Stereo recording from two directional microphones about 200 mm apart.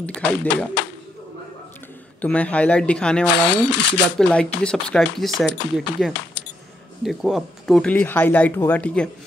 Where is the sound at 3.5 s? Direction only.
60° left (ahead or behind).